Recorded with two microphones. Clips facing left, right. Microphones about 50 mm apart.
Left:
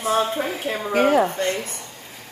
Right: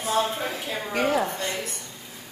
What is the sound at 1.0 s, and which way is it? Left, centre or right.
Speech, left.